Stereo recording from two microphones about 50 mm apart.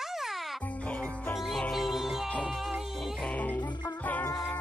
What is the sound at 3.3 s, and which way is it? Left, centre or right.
Music, left.